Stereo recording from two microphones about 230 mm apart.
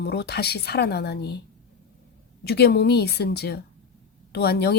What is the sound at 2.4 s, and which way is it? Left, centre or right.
A woman's voice, left.